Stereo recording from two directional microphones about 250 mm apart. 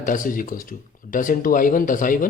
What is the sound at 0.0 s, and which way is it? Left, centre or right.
Speech, left.